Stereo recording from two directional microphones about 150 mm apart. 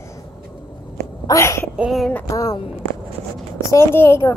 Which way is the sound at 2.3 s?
25° left (ahead or behind).